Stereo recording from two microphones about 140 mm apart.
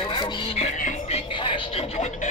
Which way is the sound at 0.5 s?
55° left (ahead or behind).